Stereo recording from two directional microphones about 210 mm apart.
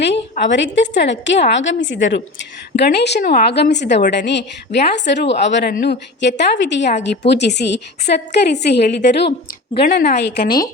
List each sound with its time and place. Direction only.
0.0 s a woman's voice: 55° left (ahead or behind)